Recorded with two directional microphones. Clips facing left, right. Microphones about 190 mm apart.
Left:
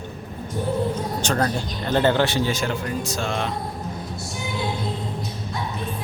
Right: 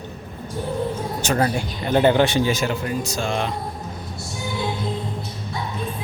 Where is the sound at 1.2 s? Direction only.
10° right (ahead or behind).